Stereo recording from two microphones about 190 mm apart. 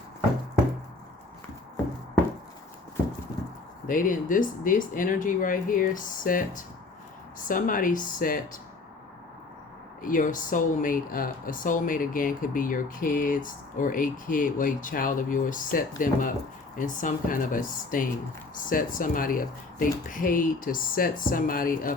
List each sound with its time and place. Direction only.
3.8 s speech: 45° left (ahead or behind)
10.0 s speech: 45° left (ahead or behind)